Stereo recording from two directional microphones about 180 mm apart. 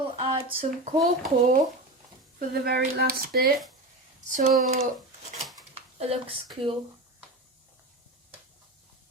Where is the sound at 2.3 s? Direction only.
60° right (ahead or behind).